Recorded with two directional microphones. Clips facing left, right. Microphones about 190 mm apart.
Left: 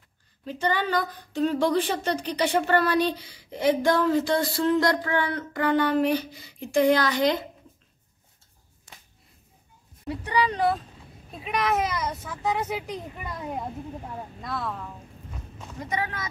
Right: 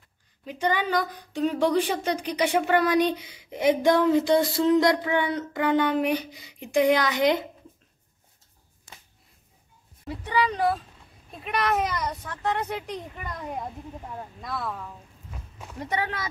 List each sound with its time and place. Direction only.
0.5 s speech: 10° right (ahead or behind)
10.0 s speech: centre (ahead or behind)
15.9 s speech: 75° right (ahead or behind)